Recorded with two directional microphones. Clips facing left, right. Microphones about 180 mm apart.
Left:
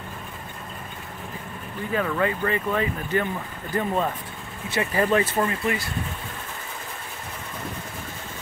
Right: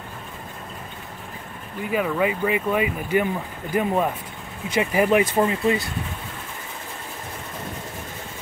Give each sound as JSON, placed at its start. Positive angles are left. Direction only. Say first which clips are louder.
{"t": 1.9, "sound": "speech", "louder": "right 2 dB", "side_deg": -10}